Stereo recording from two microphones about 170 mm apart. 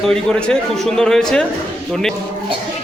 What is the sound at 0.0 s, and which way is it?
A man's voice, 5° left (ahead or behind).